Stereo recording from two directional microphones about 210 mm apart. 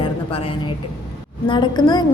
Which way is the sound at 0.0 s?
25° left (ahead or behind).